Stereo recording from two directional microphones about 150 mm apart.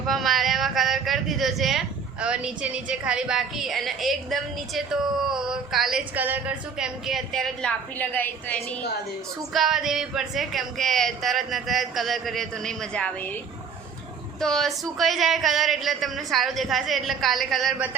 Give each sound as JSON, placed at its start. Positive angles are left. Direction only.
{"t": 0.1, "sound": "a sound", "side_deg": 0}
{"t": 2.2, "sound": "speech", "side_deg": -5}
{"t": 9.5, "sound": "speech", "side_deg": 0}
{"t": 14.4, "sound": "speech", "side_deg": 0}